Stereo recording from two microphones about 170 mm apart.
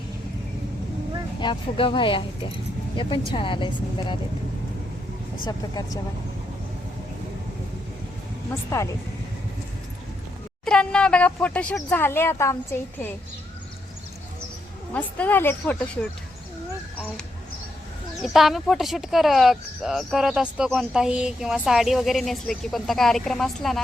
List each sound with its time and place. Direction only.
1.4 s speech: 30° left (ahead or behind)
5.5 s speech: 25° left (ahead or behind)
8.7 s speech: 15° left (ahead or behind)
10.7 s speech: 5° left (ahead or behind)
14.9 s speech: 10° left (ahead or behind)
18.2 s speech: centre (ahead or behind)